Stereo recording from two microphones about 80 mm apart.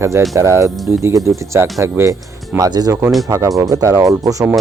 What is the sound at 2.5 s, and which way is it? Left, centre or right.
Speech, right.